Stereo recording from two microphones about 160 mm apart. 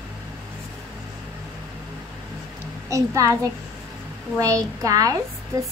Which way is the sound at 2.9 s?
20° right (ahead or behind).